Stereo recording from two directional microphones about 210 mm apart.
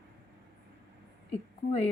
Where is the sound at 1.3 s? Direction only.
30° left (ahead or behind).